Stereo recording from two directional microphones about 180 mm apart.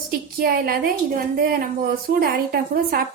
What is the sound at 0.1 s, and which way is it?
A woman's voice, 55° right (ahead or behind).